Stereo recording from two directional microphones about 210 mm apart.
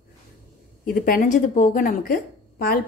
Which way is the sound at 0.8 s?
40° left (ahead or behind).